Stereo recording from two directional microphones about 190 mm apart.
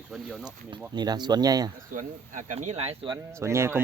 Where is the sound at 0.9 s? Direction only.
20° right (ahead or behind).